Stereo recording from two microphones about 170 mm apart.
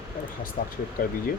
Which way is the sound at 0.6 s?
55° left (ahead or behind).